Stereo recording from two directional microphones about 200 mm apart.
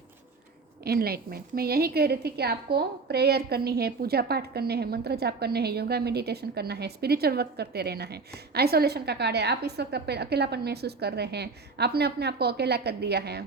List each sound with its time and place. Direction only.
0.9 s a woman's voice: 50° right (ahead or behind)